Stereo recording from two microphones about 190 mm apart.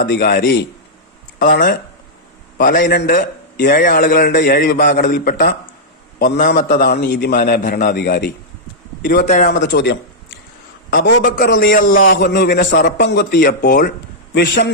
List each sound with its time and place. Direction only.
0.0 s a man's voice: 60° left (ahead or behind)
1.4 s a man's voice: 50° left (ahead or behind)
9.2 s a man's voice: 45° left (ahead or behind)
9.6 s a man's voice: 65° left (ahead or behind)
10.9 s a man's voice: 55° left (ahead or behind)